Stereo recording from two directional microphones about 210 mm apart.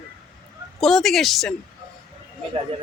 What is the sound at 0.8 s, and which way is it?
Speech, centre (ahead or behind).